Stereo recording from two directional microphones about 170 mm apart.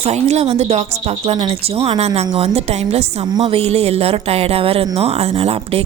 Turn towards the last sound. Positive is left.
turn(degrees=-35)  # may be behind; listen again after turning